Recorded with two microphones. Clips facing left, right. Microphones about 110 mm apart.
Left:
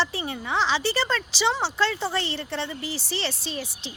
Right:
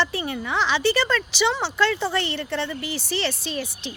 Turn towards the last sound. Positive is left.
turn(degrees=30)  # may be behind; listen again after turning